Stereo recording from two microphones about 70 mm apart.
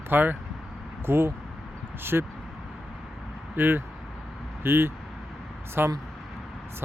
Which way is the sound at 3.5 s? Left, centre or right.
Right.